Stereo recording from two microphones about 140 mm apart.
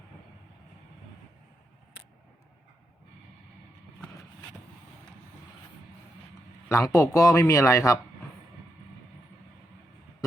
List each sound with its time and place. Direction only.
6.7 s speech: 20° left (ahead or behind)